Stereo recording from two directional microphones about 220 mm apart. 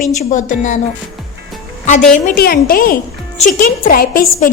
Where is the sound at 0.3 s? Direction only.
35° left (ahead or behind).